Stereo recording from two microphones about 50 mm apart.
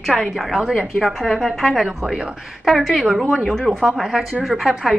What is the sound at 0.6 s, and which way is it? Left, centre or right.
Speech, centre.